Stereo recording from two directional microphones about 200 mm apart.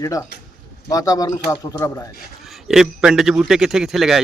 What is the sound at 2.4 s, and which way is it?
A man's voice, centre (ahead or behind).